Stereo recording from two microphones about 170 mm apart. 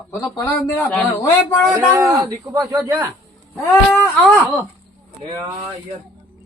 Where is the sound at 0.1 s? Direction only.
20° left (ahead or behind).